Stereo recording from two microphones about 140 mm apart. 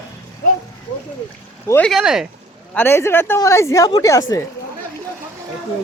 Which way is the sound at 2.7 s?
15° left (ahead or behind).